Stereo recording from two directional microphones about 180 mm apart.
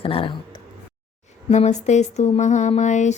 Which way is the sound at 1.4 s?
40° left (ahead or behind).